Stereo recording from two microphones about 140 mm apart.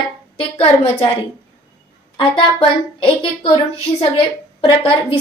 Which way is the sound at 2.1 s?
35° left (ahead or behind).